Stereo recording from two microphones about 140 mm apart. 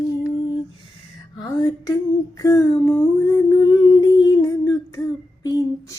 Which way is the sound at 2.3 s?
25° left (ahead or behind).